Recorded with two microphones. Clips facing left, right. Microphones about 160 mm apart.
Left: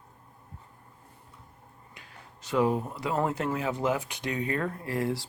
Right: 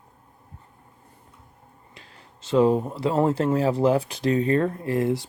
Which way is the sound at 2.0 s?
25° right (ahead or behind).